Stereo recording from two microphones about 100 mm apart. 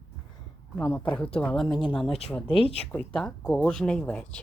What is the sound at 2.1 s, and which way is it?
Speech, 90° left.